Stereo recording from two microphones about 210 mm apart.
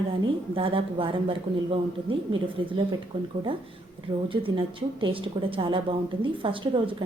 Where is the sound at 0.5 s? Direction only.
25° right (ahead or behind).